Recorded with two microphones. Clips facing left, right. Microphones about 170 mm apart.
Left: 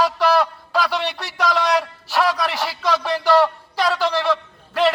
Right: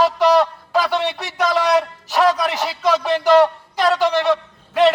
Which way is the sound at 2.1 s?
20° right (ahead or behind).